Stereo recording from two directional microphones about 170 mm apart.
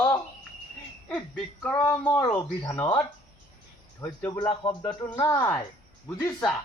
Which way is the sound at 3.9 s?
15° left (ahead or behind).